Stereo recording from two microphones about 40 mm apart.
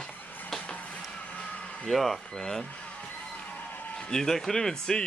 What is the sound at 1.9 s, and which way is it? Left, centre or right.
Speech, centre.